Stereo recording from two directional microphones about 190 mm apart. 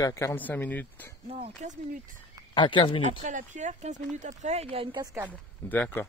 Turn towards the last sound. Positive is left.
turn(degrees=10)  # may be behind; listen again after turning